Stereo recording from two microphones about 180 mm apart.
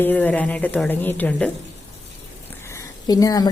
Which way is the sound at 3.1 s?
20° left (ahead or behind).